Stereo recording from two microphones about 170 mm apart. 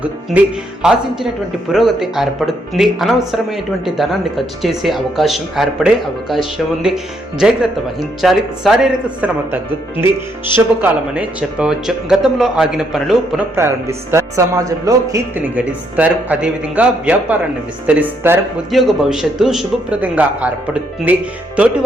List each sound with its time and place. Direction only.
0.0 s speech: 5° right (ahead or behind)
13.6 s speech: 15° right (ahead or behind)
15.4 s speech: 10° right (ahead or behind)
18.7 s speech: centre (ahead or behind)